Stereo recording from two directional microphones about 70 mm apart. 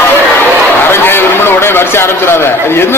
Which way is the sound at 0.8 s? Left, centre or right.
Left.